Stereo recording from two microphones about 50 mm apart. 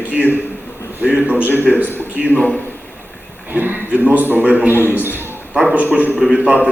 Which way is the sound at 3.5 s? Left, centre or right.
Right.